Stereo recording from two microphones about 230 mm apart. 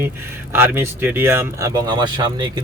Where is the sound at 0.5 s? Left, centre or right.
Centre.